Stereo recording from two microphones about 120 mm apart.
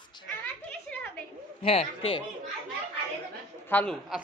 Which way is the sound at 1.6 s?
55° left (ahead or behind).